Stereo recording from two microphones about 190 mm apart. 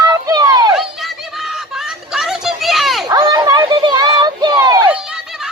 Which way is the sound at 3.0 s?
20° right (ahead or behind).